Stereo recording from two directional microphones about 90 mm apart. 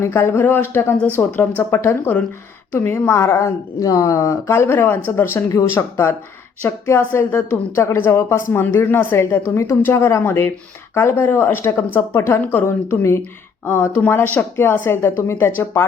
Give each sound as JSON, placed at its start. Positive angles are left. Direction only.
{"t": 0.0, "sound": "a woman's voice", "side_deg": 25}